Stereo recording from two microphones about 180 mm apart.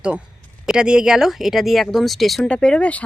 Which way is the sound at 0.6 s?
5° right (ahead or behind).